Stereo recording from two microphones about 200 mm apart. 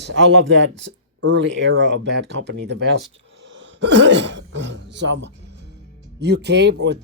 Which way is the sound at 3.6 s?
60° right (ahead or behind).